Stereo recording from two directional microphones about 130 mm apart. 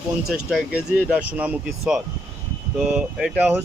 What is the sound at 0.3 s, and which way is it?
Speech, 5° right (ahead or behind).